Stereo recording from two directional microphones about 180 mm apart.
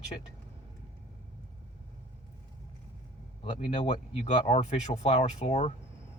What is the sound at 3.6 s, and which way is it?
Speech, 35° left (ahead or behind).